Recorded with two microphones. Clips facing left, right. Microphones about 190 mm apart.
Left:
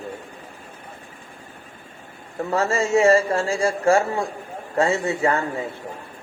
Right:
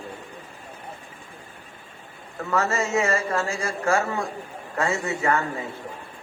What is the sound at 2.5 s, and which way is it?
A man's voice, 30° left (ahead or behind).